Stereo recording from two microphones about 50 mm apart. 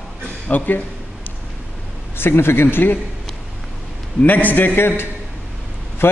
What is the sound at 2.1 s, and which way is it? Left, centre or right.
Speech, left.